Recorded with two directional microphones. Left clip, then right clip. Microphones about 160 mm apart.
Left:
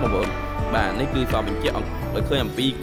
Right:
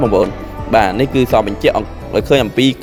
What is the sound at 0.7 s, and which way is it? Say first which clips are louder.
A man's voice: right 12 dB; 45° right (ahead or behind).